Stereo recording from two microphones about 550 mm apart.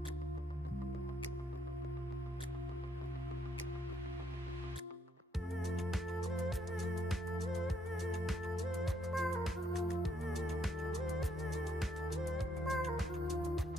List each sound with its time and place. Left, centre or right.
5.6 s music: centre